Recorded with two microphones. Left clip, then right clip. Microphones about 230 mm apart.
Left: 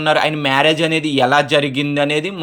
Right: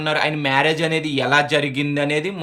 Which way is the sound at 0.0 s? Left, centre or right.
Centre.